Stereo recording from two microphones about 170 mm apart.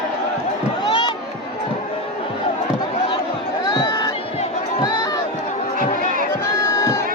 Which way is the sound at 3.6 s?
25° left (ahead or behind).